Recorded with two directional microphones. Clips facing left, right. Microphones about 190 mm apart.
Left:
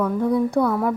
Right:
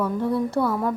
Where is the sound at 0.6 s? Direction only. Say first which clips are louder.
Left 3 dB; centre (ahead or behind).